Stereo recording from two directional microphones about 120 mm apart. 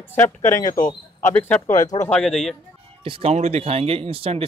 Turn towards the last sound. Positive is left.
turn(degrees=-50)  # may be behind; listen again after turning